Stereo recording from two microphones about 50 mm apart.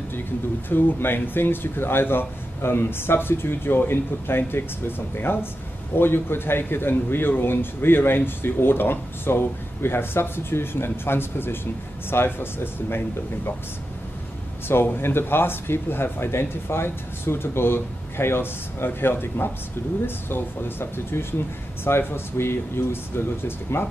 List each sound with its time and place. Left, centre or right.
0.7 s speech: left
15.0 s speech: left